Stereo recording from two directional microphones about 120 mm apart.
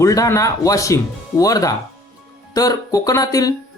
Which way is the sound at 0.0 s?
25° left (ahead or behind).